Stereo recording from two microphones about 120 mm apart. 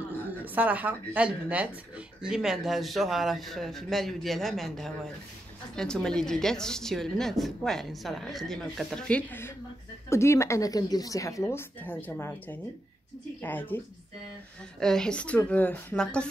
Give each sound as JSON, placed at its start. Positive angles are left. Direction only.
{"t": 0.6, "sound": "a woman's voice", "side_deg": -15}
{"t": 11.4, "sound": "a woman's voice", "side_deg": 15}
{"t": 14.8, "sound": "a woman's voice", "side_deg": 5}